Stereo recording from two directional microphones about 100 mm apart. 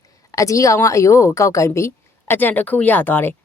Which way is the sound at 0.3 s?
35° left (ahead or behind).